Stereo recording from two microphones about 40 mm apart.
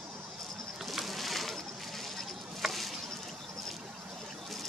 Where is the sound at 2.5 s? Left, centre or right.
Centre.